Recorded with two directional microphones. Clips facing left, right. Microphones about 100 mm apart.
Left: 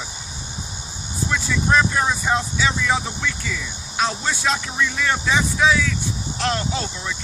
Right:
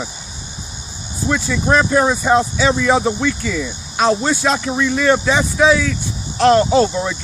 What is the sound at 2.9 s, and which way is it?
Speech, 45° right (ahead or behind).